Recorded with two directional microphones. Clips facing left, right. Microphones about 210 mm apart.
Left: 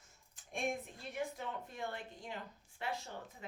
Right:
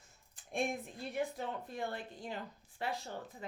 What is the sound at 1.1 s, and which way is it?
A woman's voice, 35° right (ahead or behind).